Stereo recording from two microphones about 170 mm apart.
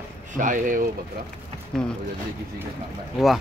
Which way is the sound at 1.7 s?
Centre (ahead or behind).